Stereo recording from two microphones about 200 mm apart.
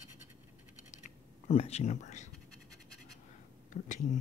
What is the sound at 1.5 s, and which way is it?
Speech, 30° left (ahead or behind).